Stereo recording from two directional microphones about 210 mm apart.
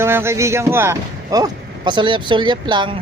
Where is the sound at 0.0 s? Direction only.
10° right (ahead or behind).